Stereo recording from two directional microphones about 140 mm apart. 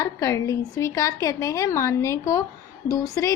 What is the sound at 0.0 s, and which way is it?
A woman's voice, 25° left (ahead or behind).